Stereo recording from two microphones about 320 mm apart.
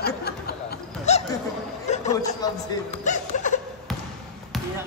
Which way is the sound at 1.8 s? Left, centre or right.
Left.